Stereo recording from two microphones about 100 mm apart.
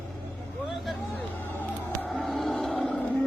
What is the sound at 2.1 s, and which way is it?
Music, centre (ahead or behind).